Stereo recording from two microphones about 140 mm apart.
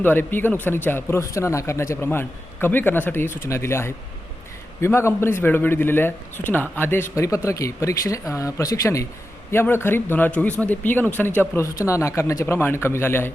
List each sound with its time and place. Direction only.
0.0 s speech: 15° left (ahead or behind)